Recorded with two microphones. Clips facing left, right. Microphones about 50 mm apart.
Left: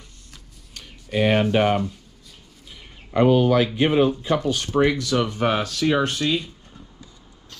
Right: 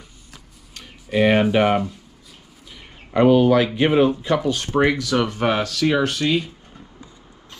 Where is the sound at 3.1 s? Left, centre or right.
Right.